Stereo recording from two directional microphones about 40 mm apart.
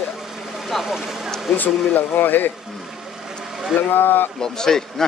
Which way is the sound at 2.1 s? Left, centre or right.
Left.